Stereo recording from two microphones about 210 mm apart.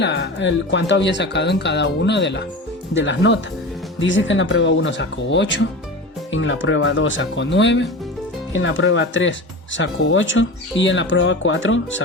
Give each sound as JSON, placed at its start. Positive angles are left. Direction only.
{"t": 0.0, "sound": "speech", "side_deg": 55}